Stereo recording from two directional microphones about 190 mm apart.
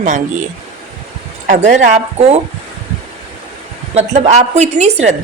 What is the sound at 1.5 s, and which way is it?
Speech, 40° right (ahead or behind).